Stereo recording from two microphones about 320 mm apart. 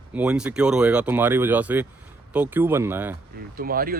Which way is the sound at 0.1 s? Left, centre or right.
Centre.